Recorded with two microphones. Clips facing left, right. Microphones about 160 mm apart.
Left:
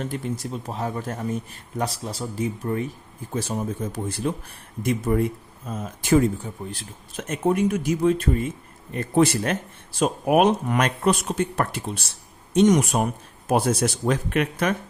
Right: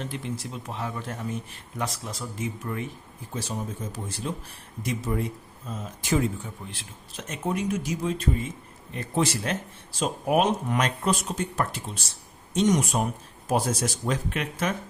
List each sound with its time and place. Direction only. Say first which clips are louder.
0.0 s speech: left 4 dB; 45° left (ahead or behind)
3.3 s speech: left 6 dB; 60° left (ahead or behind)
6.4 s speech: left 6 dB; 40° left (ahead or behind)
7.2 s speech: left 7 dB; 55° left (ahead or behind)